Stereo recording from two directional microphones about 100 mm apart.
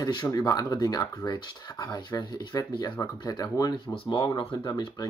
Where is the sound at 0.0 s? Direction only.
40° left (ahead or behind).